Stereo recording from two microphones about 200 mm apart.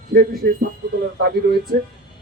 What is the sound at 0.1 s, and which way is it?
Speech, 45° right (ahead or behind).